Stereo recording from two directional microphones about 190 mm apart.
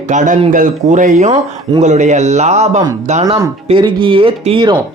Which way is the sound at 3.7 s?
25° right (ahead or behind).